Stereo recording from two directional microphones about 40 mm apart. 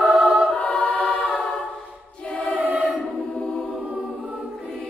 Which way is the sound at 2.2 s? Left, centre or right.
Left.